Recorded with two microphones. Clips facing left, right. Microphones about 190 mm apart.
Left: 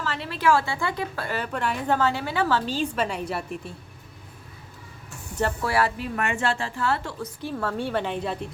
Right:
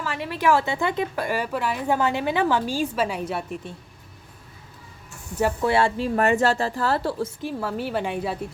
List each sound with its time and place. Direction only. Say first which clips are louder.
0.0 s a woman's voice: right 1 dB; 15° right (ahead or behind)
2.0 s a woman's voice: right 2 dB; 15° right (ahead or behind); by 3.8 s centre (ahead or behind)
5.6 s speech: right 5 dB; 25° right (ahead or behind)
7.4 s a woman's voice: left 3 dB; 10° right (ahead or behind)